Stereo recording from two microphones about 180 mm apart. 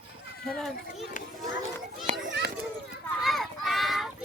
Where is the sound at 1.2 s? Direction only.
45° left (ahead or behind).